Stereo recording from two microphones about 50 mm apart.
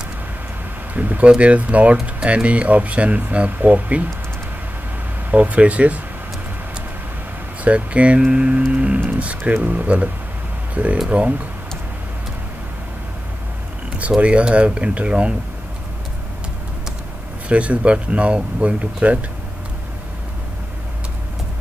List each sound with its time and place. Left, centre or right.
0.9 s speech: right
5.3 s speech: right
7.6 s speech: right
8.7 s a sound: right
9.6 s speech: right
14.2 s speech: right
17.5 s speech: right